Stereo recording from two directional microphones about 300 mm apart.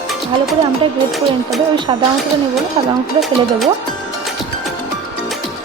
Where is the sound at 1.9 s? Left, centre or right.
Centre.